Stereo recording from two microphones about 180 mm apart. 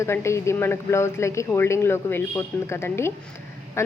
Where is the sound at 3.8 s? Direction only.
15° left (ahead or behind).